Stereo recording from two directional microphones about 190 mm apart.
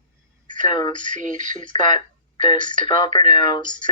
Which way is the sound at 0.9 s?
40° right (ahead or behind).